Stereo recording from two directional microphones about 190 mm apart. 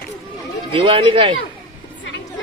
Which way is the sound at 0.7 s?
25° right (ahead or behind).